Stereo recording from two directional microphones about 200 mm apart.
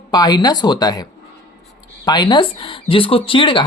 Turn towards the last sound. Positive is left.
turn(degrees=25)  # may be behind; listen again after turning